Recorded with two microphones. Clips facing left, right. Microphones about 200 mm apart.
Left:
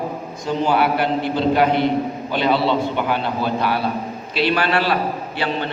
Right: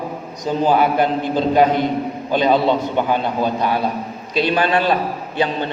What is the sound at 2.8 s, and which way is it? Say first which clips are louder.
A man's voice: right 2 dB; 15° right (ahead or behind).